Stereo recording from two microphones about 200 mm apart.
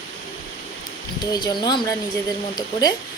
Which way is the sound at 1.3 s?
20° left (ahead or behind).